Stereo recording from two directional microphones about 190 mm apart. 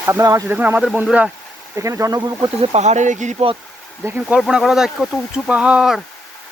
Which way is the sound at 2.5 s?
35° right (ahead or behind).